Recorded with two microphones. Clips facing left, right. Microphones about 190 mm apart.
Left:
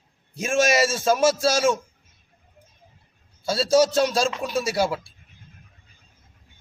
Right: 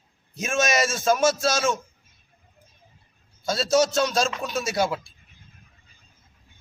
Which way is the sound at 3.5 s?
30° left (ahead or behind).